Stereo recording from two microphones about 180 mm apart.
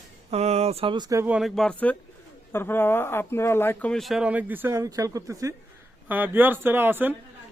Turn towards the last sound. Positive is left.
turn(degrees=-10)  # may be behind; listen again after turning